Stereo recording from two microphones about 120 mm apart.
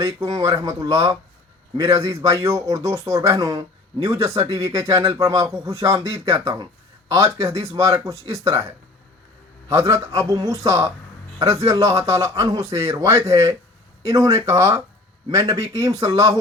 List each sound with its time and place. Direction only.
0.3 s speech: 45° right (ahead or behind)
0.6 s speech: 30° right (ahead or behind)
9.7 s speech: 25° right (ahead or behind)